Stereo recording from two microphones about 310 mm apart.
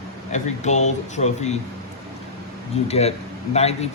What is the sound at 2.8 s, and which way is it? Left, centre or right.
A man's voice, left.